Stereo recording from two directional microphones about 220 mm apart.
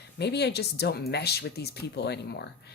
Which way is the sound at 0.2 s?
50° left (ahead or behind).